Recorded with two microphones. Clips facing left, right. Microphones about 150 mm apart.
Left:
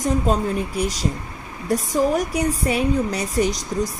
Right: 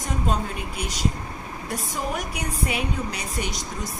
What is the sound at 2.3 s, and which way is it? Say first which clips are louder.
A woman's voice: left 7 dB; 35° left (ahead or behind).